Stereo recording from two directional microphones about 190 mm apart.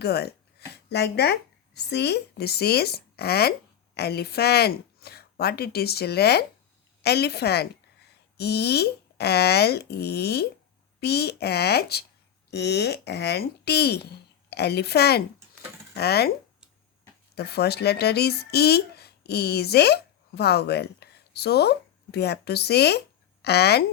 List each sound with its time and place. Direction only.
0.0 s a woman's voice: 55° left (ahead or behind)
17.3 s speech: 60° left (ahead or behind)